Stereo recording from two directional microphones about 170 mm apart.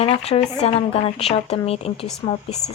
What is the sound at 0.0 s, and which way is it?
Speech, 35° left (ahead or behind).